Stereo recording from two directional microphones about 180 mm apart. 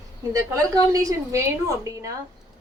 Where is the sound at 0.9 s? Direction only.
20° right (ahead or behind).